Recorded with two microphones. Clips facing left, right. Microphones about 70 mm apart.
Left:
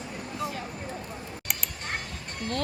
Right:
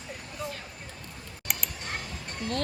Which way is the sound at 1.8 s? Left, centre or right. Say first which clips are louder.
Left 3 dB; left.